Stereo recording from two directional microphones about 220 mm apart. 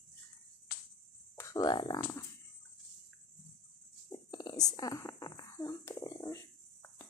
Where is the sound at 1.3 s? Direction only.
15° left (ahead or behind).